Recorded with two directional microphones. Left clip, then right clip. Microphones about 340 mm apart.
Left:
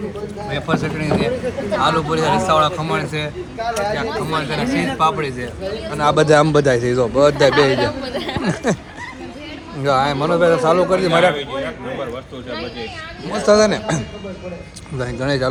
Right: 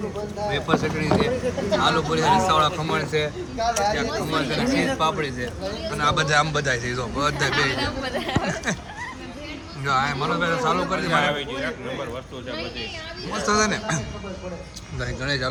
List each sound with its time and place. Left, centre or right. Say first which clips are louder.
0.5 s a man's voice: left 3 dB; centre
3.6 s speech: left 1 dB; right
3.9 s a man's voice: left 3 dB; centre
9.8 s a man's voice: left 6 dB; centre
13.5 s a man's voice: left 9 dB; centre
15.0 s a man's voice: left 6 dB; centre